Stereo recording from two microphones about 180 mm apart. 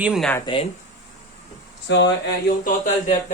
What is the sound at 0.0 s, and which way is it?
Speech, 5° right (ahead or behind).